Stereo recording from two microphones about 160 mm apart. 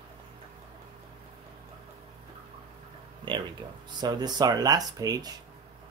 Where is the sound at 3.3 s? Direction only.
30° right (ahead or behind).